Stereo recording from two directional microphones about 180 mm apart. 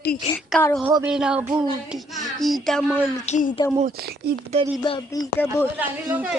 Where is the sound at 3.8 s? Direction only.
60° right (ahead or behind).